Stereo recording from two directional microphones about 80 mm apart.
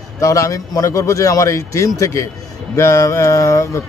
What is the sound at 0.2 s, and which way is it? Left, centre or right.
Speech, left.